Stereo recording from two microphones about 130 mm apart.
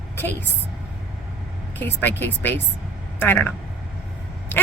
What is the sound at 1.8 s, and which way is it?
Speech, 15° left (ahead or behind).